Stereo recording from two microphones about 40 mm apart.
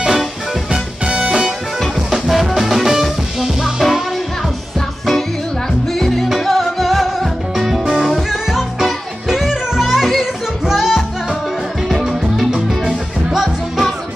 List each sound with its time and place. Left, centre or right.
0.0 s music: centre
0.7 s music: right
2.0 s music: centre
5.9 s music: centre